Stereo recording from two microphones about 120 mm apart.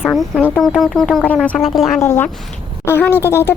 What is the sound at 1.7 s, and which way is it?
Speech, centre (ahead or behind).